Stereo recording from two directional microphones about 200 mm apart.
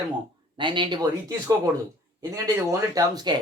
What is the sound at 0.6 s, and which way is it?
Speech, 25° right (ahead or behind).